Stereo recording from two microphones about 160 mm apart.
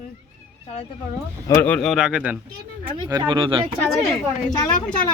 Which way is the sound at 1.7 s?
Centre (ahead or behind).